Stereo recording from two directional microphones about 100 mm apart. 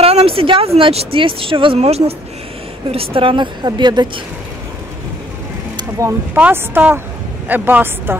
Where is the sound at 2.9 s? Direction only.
70° right (ahead or behind).